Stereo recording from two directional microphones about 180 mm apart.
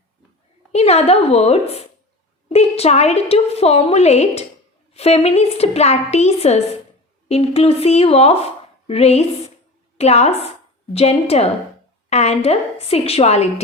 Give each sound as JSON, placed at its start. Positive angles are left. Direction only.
{"t": 0.7, "sound": "a woman's voice", "side_deg": 35}